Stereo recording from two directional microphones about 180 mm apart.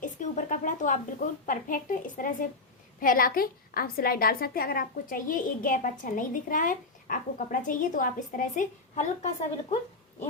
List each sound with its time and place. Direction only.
0.0 s a woman's voice: 45° left (ahead or behind)